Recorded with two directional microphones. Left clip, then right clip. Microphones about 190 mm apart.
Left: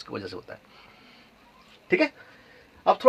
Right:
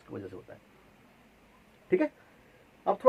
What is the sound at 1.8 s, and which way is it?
Speech, 40° left (ahead or behind).